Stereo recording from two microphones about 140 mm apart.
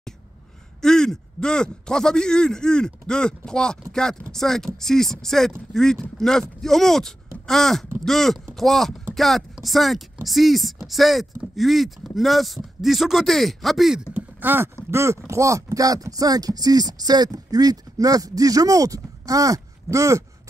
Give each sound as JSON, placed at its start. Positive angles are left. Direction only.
{"t": 0.7, "sound": "speech", "side_deg": 5}
{"t": 14.1, "sound": "speech", "side_deg": -15}